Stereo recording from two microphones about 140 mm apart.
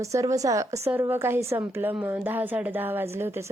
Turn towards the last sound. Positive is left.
turn(degrees=-15)  # may be behind; listen again after turning